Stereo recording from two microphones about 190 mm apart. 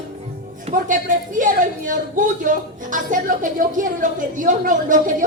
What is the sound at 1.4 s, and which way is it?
A woman's voice, 45° right (ahead or behind).